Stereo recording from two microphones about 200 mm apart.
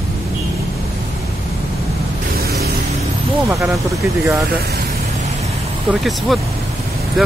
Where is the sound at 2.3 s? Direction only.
50° right (ahead or behind).